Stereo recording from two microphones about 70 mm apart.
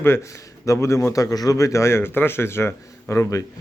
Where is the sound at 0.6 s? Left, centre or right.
Left.